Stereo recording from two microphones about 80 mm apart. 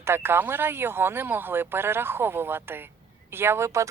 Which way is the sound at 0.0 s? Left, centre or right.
Right.